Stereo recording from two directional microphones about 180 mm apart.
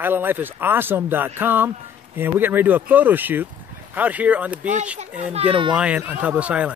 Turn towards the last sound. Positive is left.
turn(degrees=-5)  # may be behind; listen again after turning